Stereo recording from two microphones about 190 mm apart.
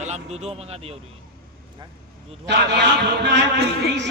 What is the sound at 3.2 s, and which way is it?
Speech, 65° right (ahead or behind).